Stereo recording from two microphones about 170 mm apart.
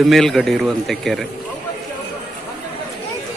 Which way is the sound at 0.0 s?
Centre (ahead or behind).